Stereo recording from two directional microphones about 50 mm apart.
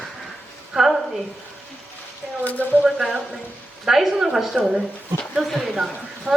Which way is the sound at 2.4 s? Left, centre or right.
Left.